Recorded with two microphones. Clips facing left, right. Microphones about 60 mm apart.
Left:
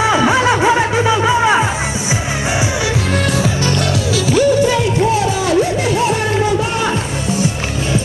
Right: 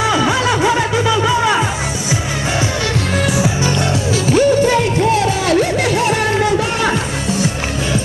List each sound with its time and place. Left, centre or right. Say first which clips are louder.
0.0 s music: left 2 dB; left
3.2 s music: even; centre
4.3 s music: right 1 dB; right